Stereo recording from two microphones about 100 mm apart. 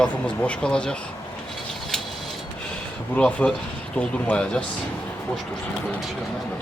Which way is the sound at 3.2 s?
10° left (ahead or behind).